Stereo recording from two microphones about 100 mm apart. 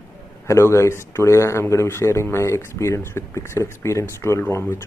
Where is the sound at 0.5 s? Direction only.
30° left (ahead or behind).